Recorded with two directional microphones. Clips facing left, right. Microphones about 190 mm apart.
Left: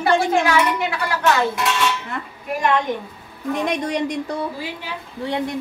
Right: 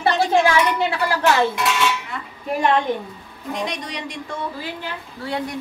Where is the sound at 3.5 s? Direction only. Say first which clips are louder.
Left 6 dB; 50° left (ahead or behind).